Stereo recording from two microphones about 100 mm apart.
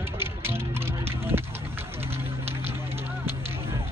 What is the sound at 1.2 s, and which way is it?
Music, 25° right (ahead or behind).